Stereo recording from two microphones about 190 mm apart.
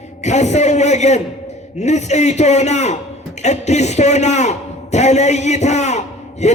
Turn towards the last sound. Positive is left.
turn(degrees=35)  # may be behind; listen again after turning